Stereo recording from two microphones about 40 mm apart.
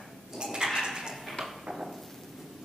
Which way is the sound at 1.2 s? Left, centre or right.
Centre.